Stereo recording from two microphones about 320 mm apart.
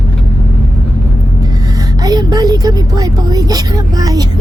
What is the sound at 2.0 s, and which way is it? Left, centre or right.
Speech, centre.